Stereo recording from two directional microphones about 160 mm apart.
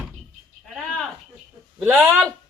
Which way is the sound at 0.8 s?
Centre (ahead or behind).